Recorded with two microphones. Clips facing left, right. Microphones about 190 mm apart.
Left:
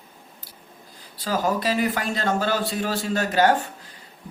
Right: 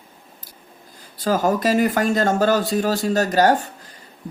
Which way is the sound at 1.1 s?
45° right (ahead or behind).